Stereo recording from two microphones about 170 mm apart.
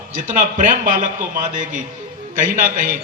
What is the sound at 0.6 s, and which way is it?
Speech, 50° right (ahead or behind).